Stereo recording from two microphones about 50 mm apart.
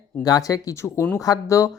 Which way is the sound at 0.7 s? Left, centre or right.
Left.